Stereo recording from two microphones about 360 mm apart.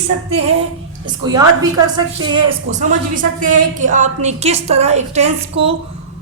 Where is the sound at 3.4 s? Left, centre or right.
Right.